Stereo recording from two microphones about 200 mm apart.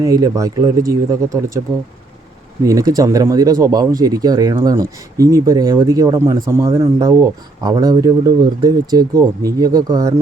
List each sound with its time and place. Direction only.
0.0 s speech: 15° right (ahead or behind)
2.6 s speech: 15° right (ahead or behind)